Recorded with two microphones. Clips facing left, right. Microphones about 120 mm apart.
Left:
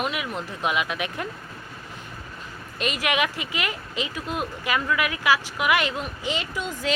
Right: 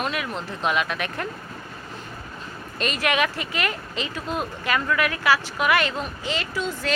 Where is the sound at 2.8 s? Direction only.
15° left (ahead or behind).